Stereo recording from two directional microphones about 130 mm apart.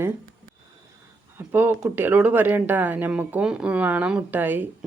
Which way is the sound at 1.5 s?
15° right (ahead or behind).